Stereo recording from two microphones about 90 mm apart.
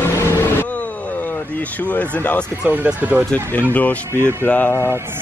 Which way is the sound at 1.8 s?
15° left (ahead or behind).